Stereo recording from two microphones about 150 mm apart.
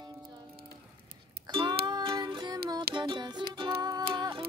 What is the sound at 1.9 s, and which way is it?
Music, 30° right (ahead or behind).